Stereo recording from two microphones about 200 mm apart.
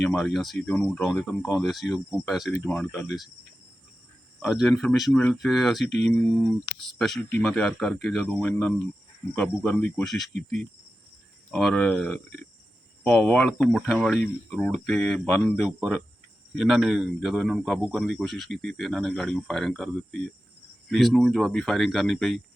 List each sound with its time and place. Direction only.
0.0 s speech: centre (ahead or behind)
4.4 s speech: centre (ahead or behind)
5.9 s speech: 60° left (ahead or behind)
6.8 s speech: centre (ahead or behind)